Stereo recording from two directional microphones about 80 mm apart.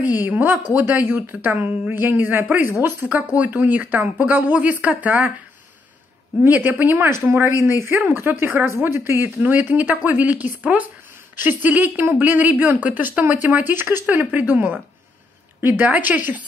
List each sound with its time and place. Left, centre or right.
0.0 s speech: right
6.4 s speech: right